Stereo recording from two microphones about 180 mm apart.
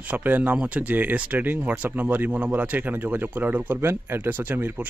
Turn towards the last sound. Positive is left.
turn(degrees=-10)  # may be behind; listen again after turning